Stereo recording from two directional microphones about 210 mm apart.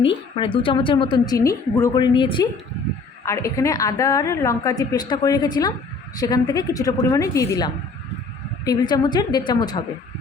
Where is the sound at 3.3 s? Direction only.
15° left (ahead or behind).